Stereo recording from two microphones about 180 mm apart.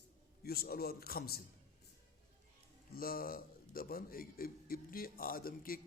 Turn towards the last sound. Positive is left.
turn(degrees=55)  # may be behind; listen again after turning